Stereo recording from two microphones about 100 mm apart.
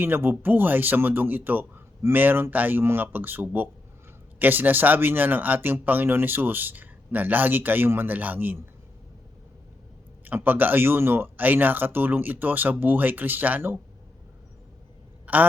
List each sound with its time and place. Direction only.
0.0 s speech: 20° right (ahead or behind)
10.2 s speech: 20° right (ahead or behind)
15.3 s a sound: 15° right (ahead or behind)